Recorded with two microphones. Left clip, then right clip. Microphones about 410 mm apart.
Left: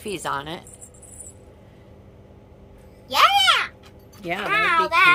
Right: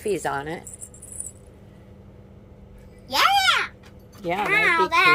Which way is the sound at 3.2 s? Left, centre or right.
Centre.